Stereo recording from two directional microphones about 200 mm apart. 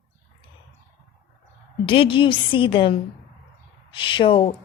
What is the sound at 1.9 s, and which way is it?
A woman's voice, 25° left (ahead or behind).